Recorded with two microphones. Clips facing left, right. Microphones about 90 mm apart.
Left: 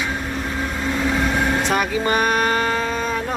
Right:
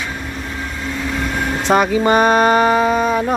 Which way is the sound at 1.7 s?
25° right (ahead or behind).